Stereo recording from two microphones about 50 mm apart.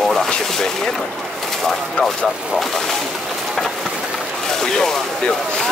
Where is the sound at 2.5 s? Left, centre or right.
Centre.